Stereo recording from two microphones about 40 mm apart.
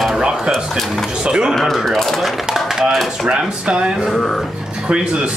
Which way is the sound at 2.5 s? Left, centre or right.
Centre.